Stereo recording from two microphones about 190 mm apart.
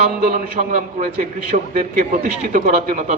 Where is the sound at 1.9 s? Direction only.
40° right (ahead or behind).